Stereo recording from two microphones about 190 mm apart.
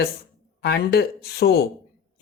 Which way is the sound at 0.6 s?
60° left (ahead or behind).